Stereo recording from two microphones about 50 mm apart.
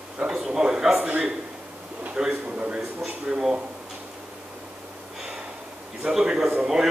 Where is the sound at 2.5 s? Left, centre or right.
Right.